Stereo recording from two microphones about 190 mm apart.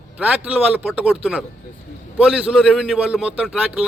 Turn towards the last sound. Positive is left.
turn(degrees=-5)  # may be behind; listen again after turning